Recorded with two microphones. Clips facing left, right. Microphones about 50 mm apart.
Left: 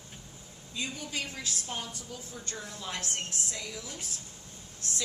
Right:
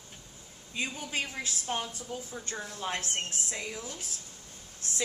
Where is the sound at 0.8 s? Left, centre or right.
Right.